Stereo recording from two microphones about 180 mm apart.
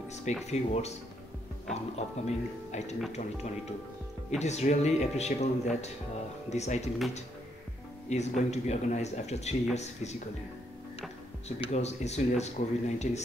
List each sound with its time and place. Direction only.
0.1 s speech: 40° left (ahead or behind)
2.0 s speech: 40° left (ahead or behind)
4.3 s speech: 40° left (ahead or behind)
8.1 s speech: 40° left (ahead or behind)
11.4 s speech: 35° left (ahead or behind)